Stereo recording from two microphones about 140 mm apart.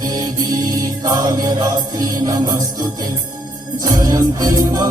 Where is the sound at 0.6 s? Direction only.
25° right (ahead or behind).